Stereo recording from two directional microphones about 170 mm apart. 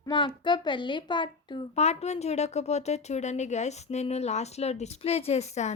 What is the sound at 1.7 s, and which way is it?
Speech, 40° left (ahead or behind).